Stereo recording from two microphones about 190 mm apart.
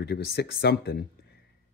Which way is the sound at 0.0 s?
60° left (ahead or behind).